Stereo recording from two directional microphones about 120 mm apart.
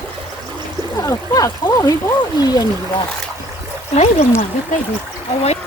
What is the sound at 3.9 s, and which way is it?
Speech, 65° left (ahead or behind).